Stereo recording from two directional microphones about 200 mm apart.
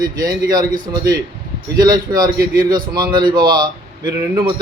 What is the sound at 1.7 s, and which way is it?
A man's voice, 20° right (ahead or behind).